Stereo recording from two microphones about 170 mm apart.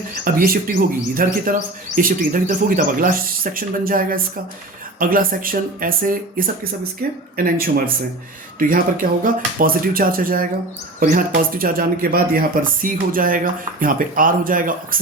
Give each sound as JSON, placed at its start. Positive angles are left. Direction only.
{"t": 0.3, "sound": "speech", "side_deg": -60}